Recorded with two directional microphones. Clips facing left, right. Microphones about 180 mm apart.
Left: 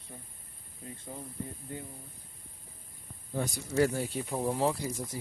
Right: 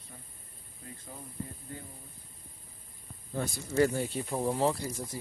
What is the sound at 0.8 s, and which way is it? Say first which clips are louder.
Speech: left 3 dB; 20° left (ahead or behind).